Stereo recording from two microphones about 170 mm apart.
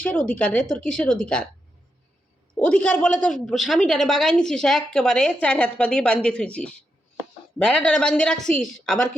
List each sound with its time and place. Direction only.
0.0 s a woman's voice: 10° left (ahead or behind)
2.6 s a woman's voice: 5° left (ahead or behind)